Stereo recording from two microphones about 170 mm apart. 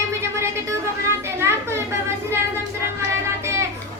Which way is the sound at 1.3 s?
15° right (ahead or behind).